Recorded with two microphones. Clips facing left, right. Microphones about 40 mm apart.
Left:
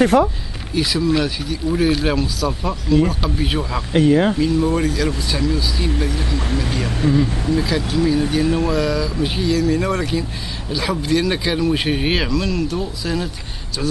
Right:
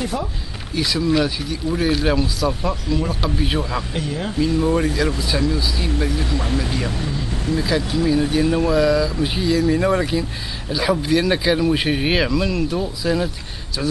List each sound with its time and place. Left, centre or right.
0.0 s speech: left
0.7 s speech: centre
3.9 s speech: left
4.4 s speech: centre
4.8 s speech: centre
7.0 s speech: left
7.6 s speech: centre
9.6 s speech: centre
12.3 s speech: centre